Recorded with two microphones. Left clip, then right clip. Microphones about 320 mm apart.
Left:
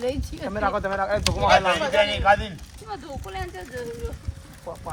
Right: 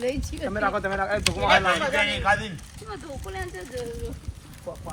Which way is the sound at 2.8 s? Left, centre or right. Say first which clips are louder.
Left 2 dB; left.